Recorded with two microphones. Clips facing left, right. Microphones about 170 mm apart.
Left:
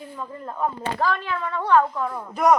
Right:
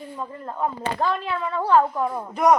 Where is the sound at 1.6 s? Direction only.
30° right (ahead or behind).